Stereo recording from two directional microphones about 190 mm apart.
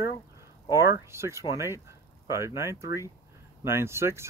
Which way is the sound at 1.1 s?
15° right (ahead or behind).